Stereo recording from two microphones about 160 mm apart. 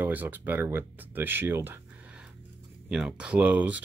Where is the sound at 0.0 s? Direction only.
10° right (ahead or behind).